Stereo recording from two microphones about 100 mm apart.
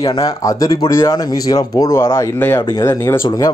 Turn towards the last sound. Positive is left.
turn(degrees=25)  # may be behind; listen again after turning